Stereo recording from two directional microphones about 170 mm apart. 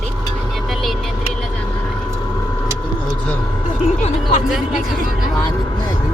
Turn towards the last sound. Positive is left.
turn(degrees=25)  # may be behind; listen again after turning